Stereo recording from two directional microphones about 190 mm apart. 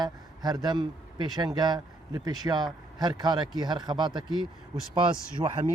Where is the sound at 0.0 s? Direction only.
20° right (ahead or behind).